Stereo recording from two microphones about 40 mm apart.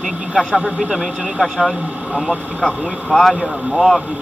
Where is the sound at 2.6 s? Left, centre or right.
Left.